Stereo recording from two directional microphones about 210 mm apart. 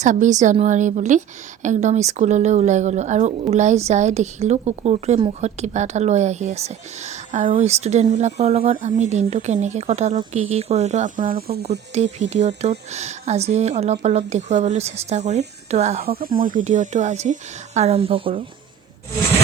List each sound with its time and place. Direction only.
0.0 s speech: 35° right (ahead or behind)
16.0 s speech: 45° right (ahead or behind); by 18.4 s 25° right (ahead or behind)